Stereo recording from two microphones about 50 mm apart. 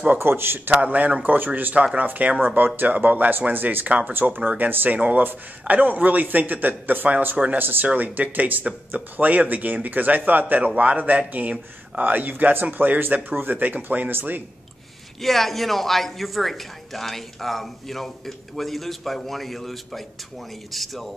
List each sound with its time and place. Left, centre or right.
0.2 s a man's voice: right
0.7 s speech: right
2.5 s speech: right
4.1 s a man's voice: right
15.2 s speech: centre